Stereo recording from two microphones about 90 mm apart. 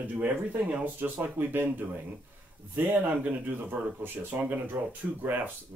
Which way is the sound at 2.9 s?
20° right (ahead or behind).